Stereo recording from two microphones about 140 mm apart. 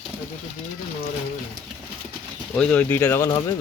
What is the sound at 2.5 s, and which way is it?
Speech, 10° left (ahead or behind).